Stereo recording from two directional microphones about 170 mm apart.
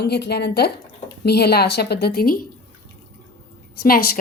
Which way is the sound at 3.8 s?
60° left (ahead or behind).